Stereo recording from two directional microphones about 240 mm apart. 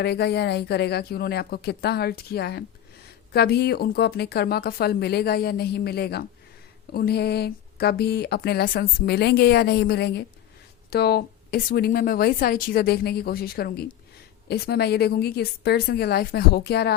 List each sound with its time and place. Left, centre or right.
0.0 s speech: left